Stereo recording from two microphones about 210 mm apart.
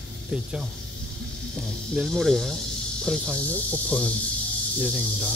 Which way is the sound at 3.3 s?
15° right (ahead or behind).